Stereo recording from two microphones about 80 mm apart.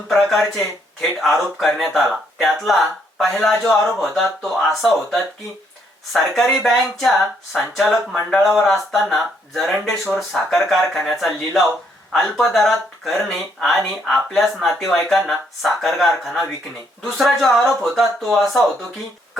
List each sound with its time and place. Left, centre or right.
0.1 s speech: centre